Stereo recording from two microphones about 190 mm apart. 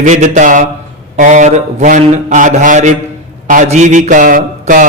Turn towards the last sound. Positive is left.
turn(degrees=-45)  # may be behind; listen again after turning